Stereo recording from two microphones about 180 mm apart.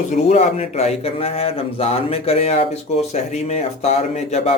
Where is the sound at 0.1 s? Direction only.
40° left (ahead or behind).